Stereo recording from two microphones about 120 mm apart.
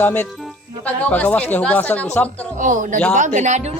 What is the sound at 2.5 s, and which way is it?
Speech, 90° right.